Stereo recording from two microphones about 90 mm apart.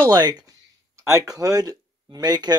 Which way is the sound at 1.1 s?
40° right (ahead or behind).